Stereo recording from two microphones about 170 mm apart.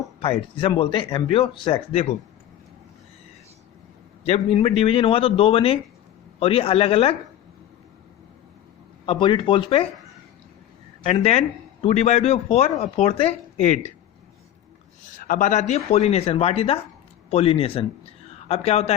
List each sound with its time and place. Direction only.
0.2 s speech: 30° left (ahead or behind)
4.3 s speech: 35° left (ahead or behind)
9.0 s speech: 30° left (ahead or behind)
11.0 s speech: 35° left (ahead or behind)
15.3 s speech: 50° left (ahead or behind)